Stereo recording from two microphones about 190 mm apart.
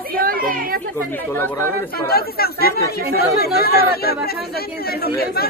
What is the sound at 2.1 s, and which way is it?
Speech, 55° left (ahead or behind).